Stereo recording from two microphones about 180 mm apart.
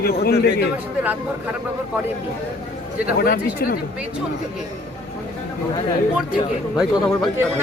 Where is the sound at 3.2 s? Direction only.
55° left (ahead or behind).